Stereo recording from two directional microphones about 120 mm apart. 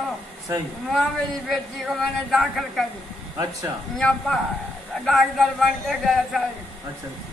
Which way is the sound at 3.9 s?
5° left (ahead or behind).